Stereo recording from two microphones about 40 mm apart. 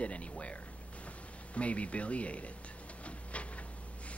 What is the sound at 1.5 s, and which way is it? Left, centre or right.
Speech, left.